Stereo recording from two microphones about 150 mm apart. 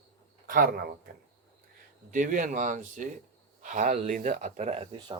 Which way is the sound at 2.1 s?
60° right (ahead or behind).